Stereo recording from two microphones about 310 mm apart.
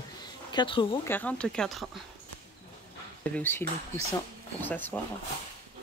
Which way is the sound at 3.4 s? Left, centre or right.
Centre.